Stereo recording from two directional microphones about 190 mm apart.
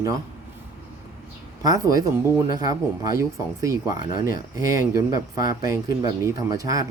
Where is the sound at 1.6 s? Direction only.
20° right (ahead or behind).